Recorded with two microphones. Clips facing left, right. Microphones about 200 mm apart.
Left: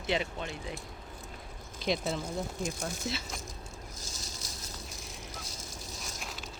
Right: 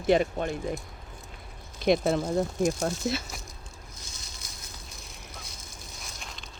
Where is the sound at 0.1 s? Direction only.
50° right (ahead or behind).